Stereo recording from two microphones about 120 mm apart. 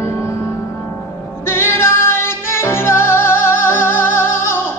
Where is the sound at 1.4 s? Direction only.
20° left (ahead or behind).